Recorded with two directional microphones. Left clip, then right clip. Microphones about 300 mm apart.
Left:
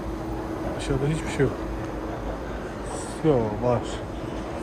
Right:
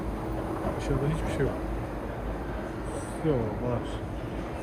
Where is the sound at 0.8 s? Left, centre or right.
Centre.